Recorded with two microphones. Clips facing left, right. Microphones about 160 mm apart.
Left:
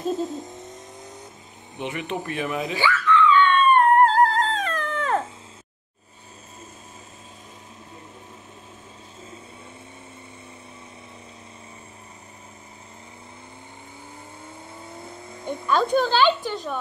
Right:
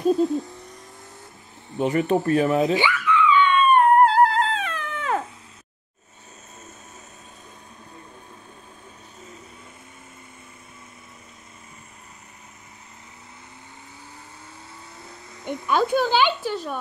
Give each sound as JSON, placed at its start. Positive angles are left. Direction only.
{"t": 0.1, "sound": "owl", "side_deg": 20}
{"t": 1.8, "sound": "speech", "side_deg": -40}
{"t": 2.7, "sound": "music", "side_deg": -15}
{"t": 14.9, "sound": "vehicle", "side_deg": 25}
{"t": 15.6, "sound": "a sound", "side_deg": -10}